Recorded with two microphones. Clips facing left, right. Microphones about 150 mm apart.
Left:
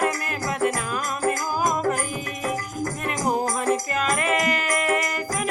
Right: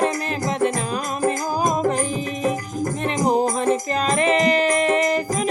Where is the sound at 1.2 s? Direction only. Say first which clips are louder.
Right 3 dB; 25° right (ahead or behind).